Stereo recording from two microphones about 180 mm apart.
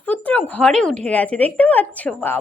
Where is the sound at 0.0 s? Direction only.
10° left (ahead or behind).